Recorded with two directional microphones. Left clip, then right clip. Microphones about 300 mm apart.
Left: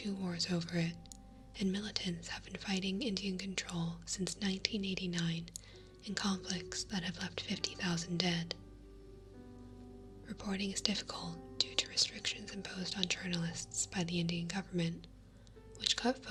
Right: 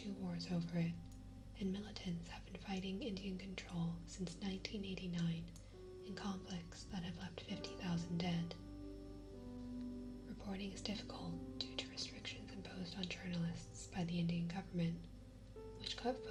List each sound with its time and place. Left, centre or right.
0.2 s speech: left
10.4 s speech: left